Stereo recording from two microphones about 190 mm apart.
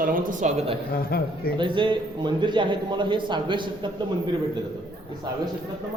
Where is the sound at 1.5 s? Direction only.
25° right (ahead or behind).